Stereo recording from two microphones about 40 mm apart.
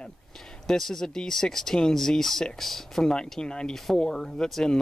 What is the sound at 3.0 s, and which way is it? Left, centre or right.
Speech, centre.